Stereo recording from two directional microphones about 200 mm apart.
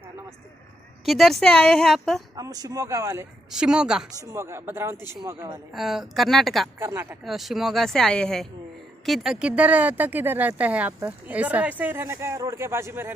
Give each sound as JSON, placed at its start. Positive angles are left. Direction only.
{"t": 1.0, "sound": "speech", "side_deg": 0}
{"t": 2.3, "sound": "speech", "side_deg": -20}
{"t": 4.2, "sound": "speech", "side_deg": -15}
{"t": 5.7, "sound": "speech", "side_deg": 0}
{"t": 6.7, "sound": "speech", "side_deg": -10}
{"t": 7.3, "sound": "speech", "side_deg": 0}